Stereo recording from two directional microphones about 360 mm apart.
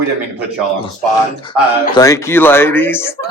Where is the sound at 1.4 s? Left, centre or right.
Centre.